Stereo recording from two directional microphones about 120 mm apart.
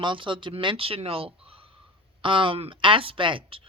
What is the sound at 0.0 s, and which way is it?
A man's voice, 45° right (ahead or behind).